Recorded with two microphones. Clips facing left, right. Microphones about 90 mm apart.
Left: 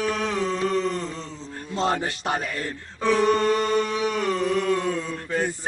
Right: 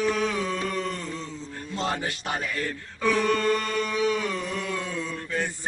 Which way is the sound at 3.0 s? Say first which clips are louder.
Left 4 dB; 25° left (ahead or behind).